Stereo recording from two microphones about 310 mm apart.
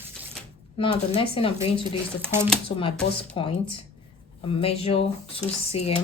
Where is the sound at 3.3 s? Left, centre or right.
Centre.